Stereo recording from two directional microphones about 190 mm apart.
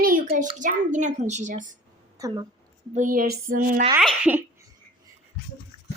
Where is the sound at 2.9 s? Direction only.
45° right (ahead or behind).